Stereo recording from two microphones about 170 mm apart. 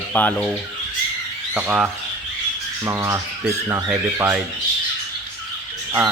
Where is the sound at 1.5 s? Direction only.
5° right (ahead or behind).